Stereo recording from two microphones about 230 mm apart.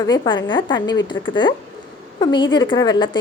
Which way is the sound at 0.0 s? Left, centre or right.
Centre.